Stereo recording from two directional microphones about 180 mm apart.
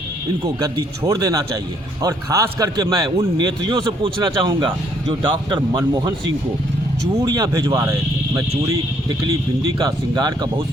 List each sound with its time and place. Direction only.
0.6 s a man's voice: 20° right (ahead or behind)
7.2 s a man's voice: 20° right (ahead or behind)